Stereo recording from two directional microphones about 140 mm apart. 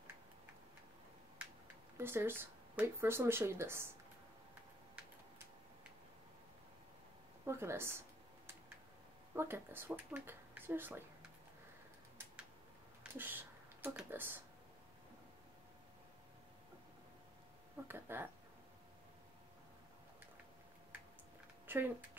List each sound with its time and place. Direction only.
2.0 s speech: 15° right (ahead or behind)
7.4 s speech: 20° right (ahead or behind)
9.3 s speech: 15° right (ahead or behind)
13.1 s speech: 15° right (ahead or behind)
17.8 s speech: 15° right (ahead or behind)
21.6 s speech: 15° right (ahead or behind)